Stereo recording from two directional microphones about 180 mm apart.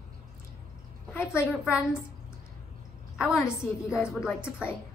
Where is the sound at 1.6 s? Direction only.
5° right (ahead or behind).